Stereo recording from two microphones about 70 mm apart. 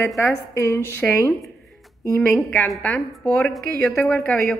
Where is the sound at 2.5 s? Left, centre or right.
Left.